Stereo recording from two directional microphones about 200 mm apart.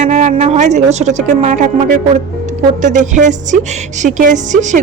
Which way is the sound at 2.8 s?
40° right (ahead or behind).